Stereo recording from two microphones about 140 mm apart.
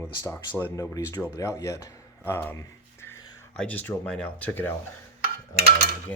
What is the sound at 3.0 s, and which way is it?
Whispering, 15° left (ahead or behind).